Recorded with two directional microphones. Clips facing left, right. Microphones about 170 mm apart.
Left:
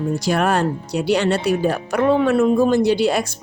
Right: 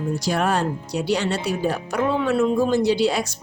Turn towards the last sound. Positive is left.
turn(degrees=55)  # may be behind; listen again after turning